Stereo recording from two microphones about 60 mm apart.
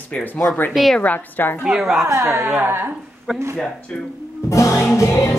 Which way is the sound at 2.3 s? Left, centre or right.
Right.